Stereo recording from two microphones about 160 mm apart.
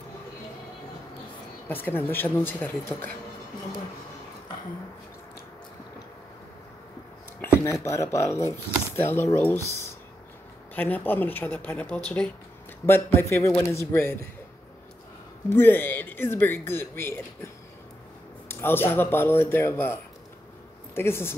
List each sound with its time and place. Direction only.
1.7 s speech: 15° left (ahead or behind)
7.8 s speech: 20° left (ahead or behind)
15.5 s speech: 15° left (ahead or behind)
18.5 s speech: 15° left (ahead or behind)